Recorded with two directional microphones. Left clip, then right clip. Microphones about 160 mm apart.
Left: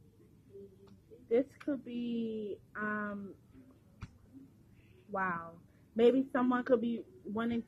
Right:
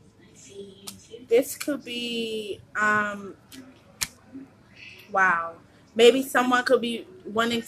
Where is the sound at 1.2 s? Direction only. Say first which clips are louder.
Right 10 dB; 40° left (ahead or behind).